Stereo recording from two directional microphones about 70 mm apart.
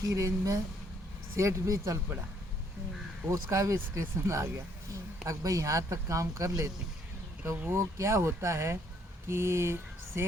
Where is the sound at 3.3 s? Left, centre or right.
Right.